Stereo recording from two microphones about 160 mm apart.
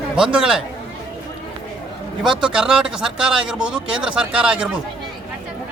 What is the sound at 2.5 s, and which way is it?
Speech, 5° right (ahead or behind).